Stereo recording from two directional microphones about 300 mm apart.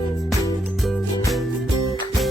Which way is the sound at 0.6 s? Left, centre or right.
Centre.